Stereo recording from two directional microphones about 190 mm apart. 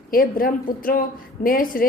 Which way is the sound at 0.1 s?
50° left (ahead or behind).